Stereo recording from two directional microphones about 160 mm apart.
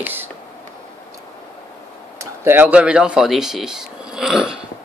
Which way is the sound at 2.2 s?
15° right (ahead or behind).